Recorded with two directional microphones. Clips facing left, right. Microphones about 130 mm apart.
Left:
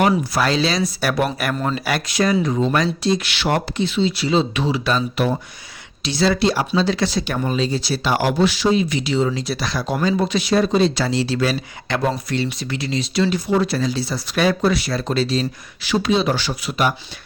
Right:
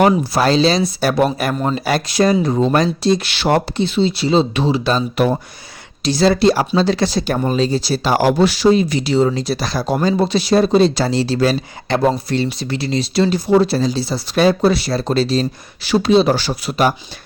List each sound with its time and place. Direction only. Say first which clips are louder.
0.1 s speech: right 4 dB; 30° right (ahead or behind)
5.1 s speech: right 4 dB; 45° right (ahead or behind)